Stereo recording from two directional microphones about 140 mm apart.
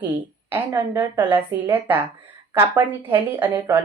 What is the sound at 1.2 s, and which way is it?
Speech, 35° right (ahead or behind).